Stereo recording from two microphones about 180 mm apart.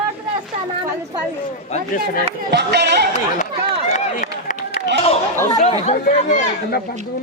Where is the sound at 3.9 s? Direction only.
45° left (ahead or behind).